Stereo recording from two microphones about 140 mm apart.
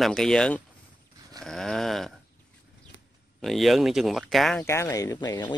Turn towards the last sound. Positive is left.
turn(degrees=30)  # may be behind; listen again after turning